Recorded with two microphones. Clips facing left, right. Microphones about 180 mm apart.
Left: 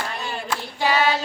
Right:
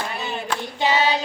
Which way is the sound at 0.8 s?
20° right (ahead or behind).